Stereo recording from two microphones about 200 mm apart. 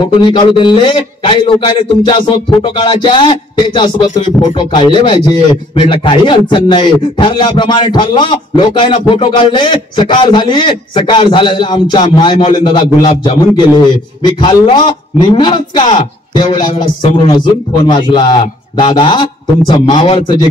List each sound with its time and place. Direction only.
0.0 s speech: 25° left (ahead or behind)